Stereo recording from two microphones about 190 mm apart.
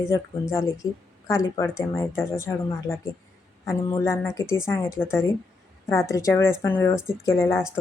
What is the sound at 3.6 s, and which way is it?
Speech, 15° left (ahead or behind).